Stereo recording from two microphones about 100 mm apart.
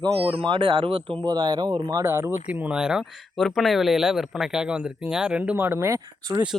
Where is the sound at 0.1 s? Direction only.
75° right (ahead or behind).